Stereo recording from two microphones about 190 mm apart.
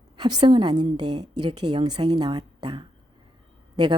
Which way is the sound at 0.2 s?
20° right (ahead or behind).